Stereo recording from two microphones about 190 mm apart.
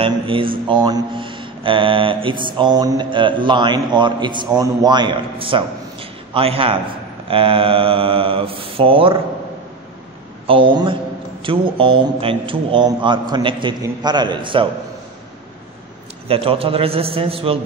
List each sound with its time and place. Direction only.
0.0 s a man's voice: 30° right (ahead or behind)
10.4 s a man's voice: 25° right (ahead or behind)
16.3 s a man's voice: 30° right (ahead or behind)